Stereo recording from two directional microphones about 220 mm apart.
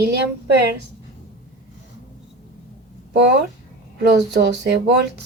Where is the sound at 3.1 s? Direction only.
50° right (ahead or behind).